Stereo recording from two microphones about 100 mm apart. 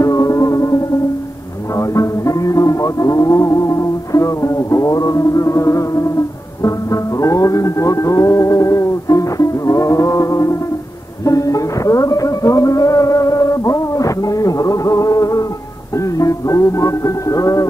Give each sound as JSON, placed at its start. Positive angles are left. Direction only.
{"t": 0.0, "sound": "music", "side_deg": 35}
{"t": 1.8, "sound": "music", "side_deg": 35}